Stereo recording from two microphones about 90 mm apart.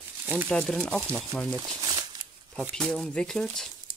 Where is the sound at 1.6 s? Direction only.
40° right (ahead or behind).